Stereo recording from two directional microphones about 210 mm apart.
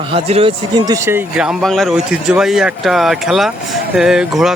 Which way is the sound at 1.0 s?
10° right (ahead or behind).